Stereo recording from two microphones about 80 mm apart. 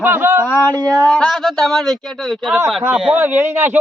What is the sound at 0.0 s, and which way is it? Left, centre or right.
Speech, right.